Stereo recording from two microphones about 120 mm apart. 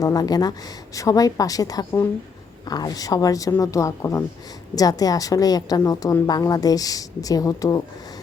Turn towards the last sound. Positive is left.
turn(degrees=30)  # may be behind; listen again after turning